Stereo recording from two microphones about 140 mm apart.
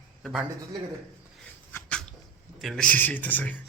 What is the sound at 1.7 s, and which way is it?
Dog, 10° left (ahead or behind).